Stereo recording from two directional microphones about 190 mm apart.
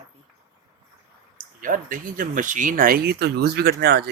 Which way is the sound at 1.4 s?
45° right (ahead or behind).